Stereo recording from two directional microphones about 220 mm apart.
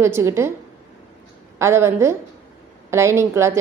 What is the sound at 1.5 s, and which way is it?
A woman's voice, 10° right (ahead or behind).